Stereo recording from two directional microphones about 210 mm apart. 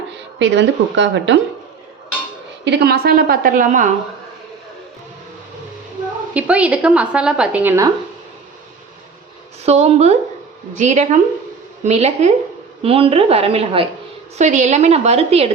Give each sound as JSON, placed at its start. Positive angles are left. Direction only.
{"t": 0.3, "sound": "speech", "side_deg": -60}
{"t": 2.6, "sound": "a woman's voice", "side_deg": -50}
{"t": 6.3, "sound": "a woman's voice", "side_deg": -5}
{"t": 9.6, "sound": "a woman's voice", "side_deg": -30}